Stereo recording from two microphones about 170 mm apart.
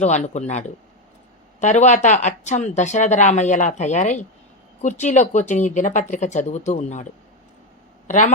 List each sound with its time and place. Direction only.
0.3 s speech: 45° left (ahead or behind)